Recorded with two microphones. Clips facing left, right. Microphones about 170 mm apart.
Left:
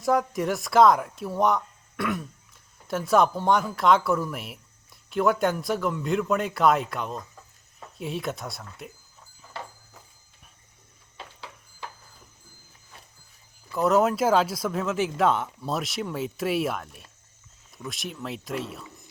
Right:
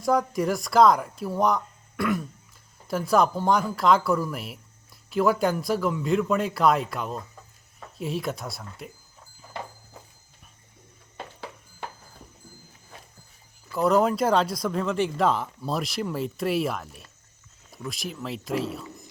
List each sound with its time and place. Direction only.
0.0 s speech: centre (ahead or behind)
11.2 s horse: 50° right (ahead or behind)
13.7 s speech: centre (ahead or behind)